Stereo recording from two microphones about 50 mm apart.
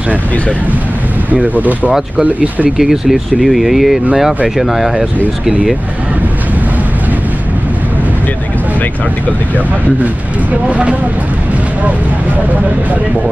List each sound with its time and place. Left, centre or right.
1.3 s speech: right
1.9 s speech: centre
10.7 s speech: right